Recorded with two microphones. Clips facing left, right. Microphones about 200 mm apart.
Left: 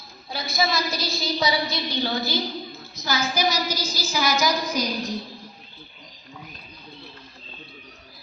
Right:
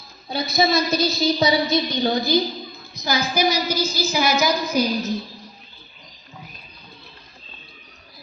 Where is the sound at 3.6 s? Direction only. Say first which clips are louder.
Right 6 dB; 55° right (ahead or behind).